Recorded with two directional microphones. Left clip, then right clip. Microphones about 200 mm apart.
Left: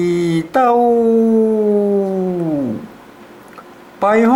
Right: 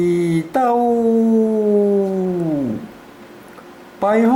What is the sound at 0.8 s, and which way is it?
Speech, 20° right (ahead or behind).